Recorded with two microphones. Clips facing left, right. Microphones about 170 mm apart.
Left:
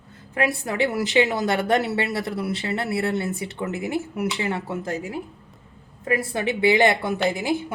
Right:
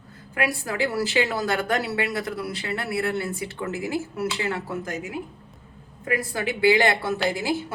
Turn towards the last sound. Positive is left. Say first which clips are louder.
# left 1 dB
turn(degrees=20)  # may be behind; listen again after turning